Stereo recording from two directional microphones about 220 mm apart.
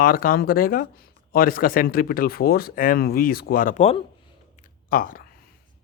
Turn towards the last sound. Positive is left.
turn(degrees=40)  # may be behind; listen again after turning